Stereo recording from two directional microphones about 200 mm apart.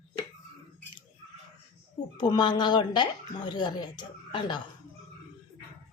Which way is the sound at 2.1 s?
20° left (ahead or behind).